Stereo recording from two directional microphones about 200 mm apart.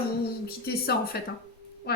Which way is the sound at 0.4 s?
50° left (ahead or behind).